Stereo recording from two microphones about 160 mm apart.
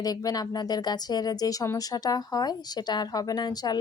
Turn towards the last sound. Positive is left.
turn(degrees=25)  # may be behind; listen again after turning